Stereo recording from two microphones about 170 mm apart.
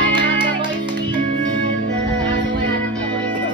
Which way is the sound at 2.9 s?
5° left (ahead or behind).